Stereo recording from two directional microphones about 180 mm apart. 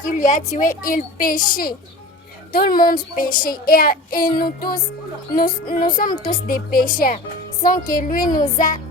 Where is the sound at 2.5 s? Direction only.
55° left (ahead or behind).